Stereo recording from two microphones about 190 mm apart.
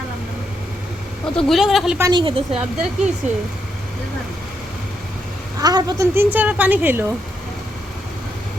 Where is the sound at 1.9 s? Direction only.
15° right (ahead or behind).